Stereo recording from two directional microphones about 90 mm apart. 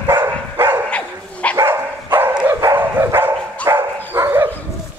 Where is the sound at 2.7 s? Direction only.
30° right (ahead or behind).